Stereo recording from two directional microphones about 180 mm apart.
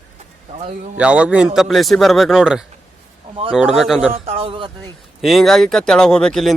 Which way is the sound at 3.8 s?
Centre (ahead or behind).